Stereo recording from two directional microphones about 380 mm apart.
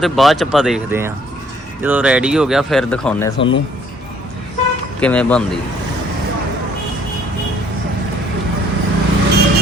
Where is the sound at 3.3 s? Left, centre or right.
Left.